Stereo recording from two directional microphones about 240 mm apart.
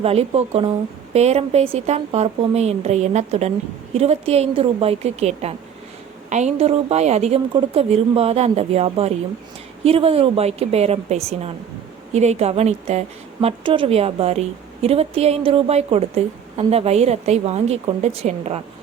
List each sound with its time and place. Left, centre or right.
0.0 s a woman's voice: right